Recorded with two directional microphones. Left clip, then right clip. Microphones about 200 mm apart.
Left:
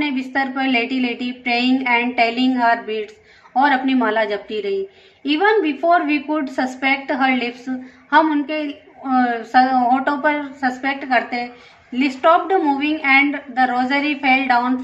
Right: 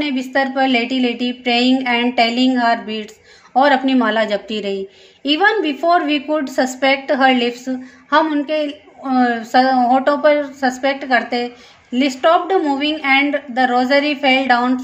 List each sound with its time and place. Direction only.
0.0 s a woman's voice: 45° right (ahead or behind)